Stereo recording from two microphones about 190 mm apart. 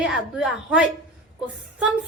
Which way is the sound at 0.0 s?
5° right (ahead or behind).